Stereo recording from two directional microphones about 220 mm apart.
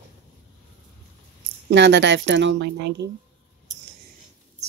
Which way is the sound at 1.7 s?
55° right (ahead or behind).